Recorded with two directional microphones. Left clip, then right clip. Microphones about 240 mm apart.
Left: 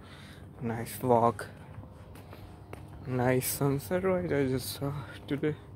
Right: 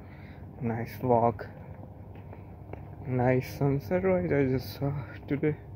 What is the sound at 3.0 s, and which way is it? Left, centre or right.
Speech, centre.